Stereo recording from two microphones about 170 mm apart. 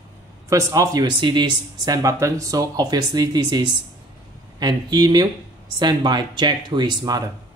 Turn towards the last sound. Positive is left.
turn(degrees=-25)  # may be behind; listen again after turning